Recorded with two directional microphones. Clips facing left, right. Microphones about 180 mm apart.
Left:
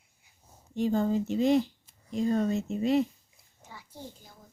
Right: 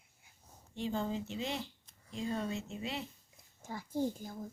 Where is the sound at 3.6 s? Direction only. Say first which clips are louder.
Right 10 dB; 45° right (ahead or behind).